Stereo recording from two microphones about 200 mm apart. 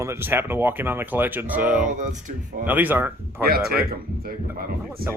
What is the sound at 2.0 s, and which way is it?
Speech, 40° right (ahead or behind).